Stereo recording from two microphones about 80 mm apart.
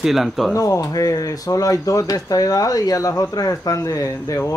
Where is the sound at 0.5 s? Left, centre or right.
Left.